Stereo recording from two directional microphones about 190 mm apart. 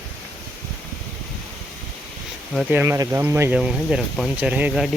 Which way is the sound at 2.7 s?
15° right (ahead or behind).